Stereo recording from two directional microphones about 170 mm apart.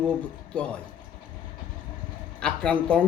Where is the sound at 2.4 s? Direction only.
5° left (ahead or behind).